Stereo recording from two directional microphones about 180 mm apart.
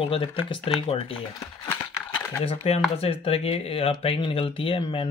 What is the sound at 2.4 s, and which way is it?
Speech, 35° left (ahead or behind).